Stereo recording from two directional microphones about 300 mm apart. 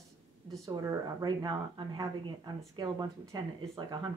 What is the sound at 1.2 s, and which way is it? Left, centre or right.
A woman's voice, centre.